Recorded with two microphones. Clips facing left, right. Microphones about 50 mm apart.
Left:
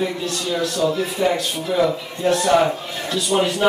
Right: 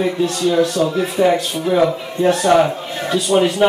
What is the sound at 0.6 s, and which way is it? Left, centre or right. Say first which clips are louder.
A man's voice: right 4 dB; right.